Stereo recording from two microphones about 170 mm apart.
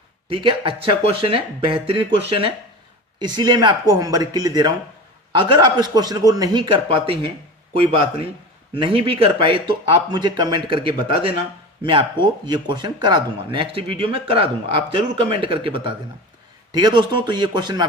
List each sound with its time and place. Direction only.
0.3 s a man's voice: 30° right (ahead or behind)